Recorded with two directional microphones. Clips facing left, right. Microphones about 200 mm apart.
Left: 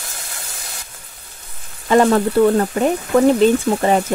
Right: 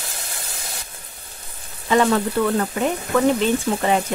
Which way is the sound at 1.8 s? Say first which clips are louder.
Left 4 dB; 45° left (ahead or behind).